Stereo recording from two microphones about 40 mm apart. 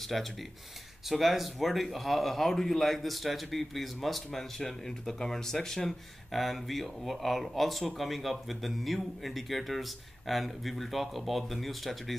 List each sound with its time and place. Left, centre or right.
0.0 s speech: centre
6.3 s speech: centre